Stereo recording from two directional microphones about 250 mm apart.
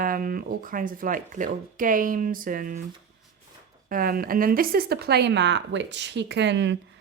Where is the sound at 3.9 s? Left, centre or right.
Right.